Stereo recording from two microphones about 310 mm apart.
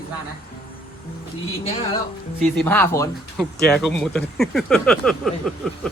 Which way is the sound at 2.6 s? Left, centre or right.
Centre.